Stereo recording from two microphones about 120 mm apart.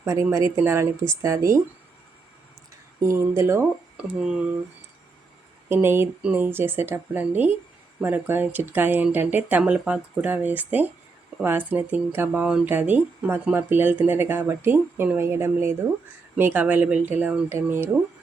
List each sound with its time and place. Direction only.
0.0 s speech: 25° right (ahead or behind)
3.0 s speech: 25° right (ahead or behind)
3.9 s speech: 10° right (ahead or behind)
5.6 s speech: 20° right (ahead or behind)